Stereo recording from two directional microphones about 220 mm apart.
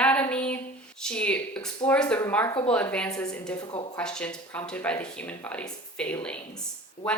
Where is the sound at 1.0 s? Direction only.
5° left (ahead or behind).